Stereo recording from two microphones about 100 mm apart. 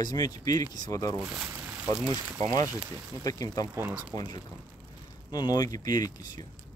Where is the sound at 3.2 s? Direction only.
35° left (ahead or behind).